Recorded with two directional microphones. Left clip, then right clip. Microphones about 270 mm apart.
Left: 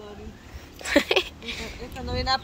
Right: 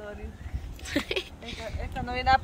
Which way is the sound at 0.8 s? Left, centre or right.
Centre.